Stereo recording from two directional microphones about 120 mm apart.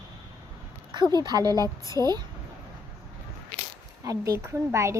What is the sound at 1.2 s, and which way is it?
Speech, 35° right (ahead or behind).